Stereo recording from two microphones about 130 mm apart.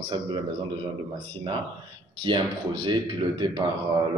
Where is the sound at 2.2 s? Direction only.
35° right (ahead or behind).